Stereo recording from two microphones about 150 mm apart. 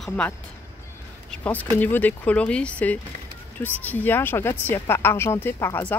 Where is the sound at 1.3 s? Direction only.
10° left (ahead or behind).